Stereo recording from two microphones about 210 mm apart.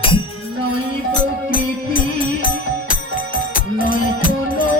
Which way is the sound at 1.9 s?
40° left (ahead or behind).